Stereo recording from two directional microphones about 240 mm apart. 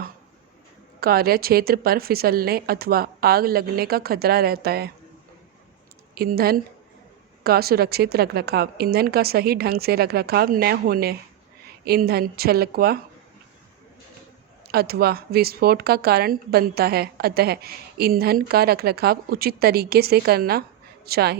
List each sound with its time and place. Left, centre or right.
0.9 s speech: right
6.1 s speech: right
14.7 s speech: right